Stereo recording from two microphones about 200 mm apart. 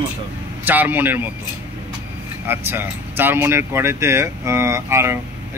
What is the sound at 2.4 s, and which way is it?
Speech, 10° right (ahead or behind).